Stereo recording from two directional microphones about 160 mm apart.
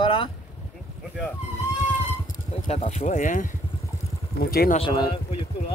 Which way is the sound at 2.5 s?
40° left (ahead or behind).